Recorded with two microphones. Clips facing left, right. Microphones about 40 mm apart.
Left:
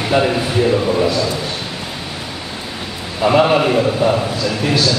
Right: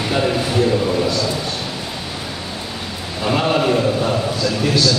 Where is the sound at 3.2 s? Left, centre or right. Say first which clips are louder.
Left 5 dB; left.